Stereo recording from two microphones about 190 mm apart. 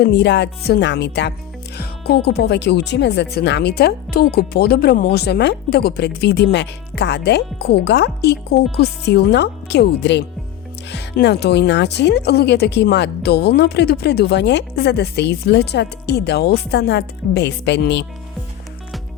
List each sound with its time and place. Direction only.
0.0 s speech: 65° left (ahead or behind)